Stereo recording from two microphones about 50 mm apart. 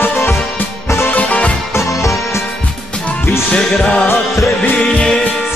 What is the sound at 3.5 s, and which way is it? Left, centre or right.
Music, centre.